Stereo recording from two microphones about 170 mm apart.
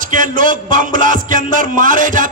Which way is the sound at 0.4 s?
50° right (ahead or behind).